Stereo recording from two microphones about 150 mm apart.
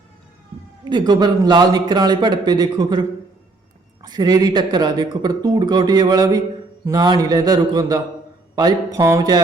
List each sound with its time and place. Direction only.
0.9 s speech: 30° right (ahead or behind)